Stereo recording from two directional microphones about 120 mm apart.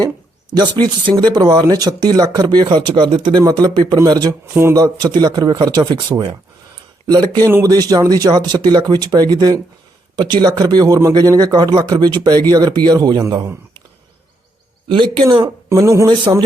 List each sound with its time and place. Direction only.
0.5 s speech: 35° right (ahead or behind)
14.8 s speech: 40° right (ahead or behind)
15.7 s speech: 25° right (ahead or behind)